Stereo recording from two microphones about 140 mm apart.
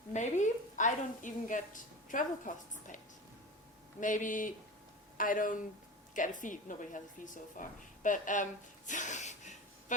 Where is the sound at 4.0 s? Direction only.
65° left (ahead or behind).